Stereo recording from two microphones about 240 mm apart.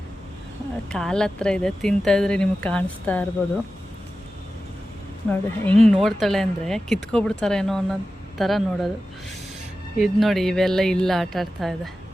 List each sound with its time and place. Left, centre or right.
0.9 s speech: centre
5.3 s speech: centre
10.0 s speech: centre